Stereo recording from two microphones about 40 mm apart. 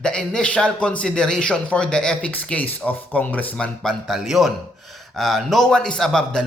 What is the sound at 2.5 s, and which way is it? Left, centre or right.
Speech, left.